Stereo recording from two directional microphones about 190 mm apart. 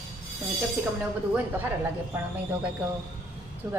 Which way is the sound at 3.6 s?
10° right (ahead or behind).